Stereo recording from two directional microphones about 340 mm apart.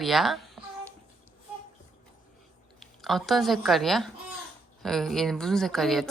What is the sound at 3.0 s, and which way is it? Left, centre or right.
Speech, centre.